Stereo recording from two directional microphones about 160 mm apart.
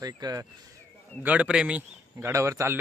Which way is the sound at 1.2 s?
10° right (ahead or behind).